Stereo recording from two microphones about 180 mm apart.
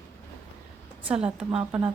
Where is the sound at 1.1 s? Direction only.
5° right (ahead or behind).